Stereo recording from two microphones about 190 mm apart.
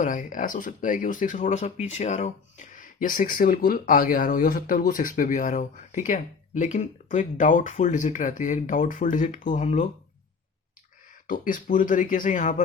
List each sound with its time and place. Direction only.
0.0 s speech: 45° left (ahead or behind)
11.3 s speech: 45° left (ahead or behind)